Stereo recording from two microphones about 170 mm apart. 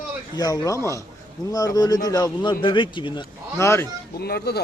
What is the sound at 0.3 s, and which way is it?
Speech, 20° left (ahead or behind).